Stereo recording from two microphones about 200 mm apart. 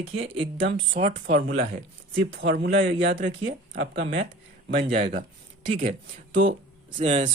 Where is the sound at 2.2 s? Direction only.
60° right (ahead or behind); by 3.6 s 40° right (ahead or behind).